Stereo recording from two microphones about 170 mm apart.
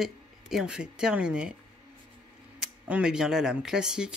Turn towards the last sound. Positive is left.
turn(degrees=-5)  # may be behind; listen again after turning